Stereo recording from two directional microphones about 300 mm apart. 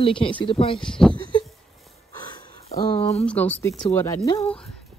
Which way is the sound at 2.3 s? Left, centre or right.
Centre.